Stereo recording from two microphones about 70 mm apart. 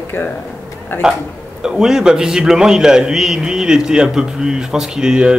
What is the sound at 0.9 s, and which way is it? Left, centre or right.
Speech, left.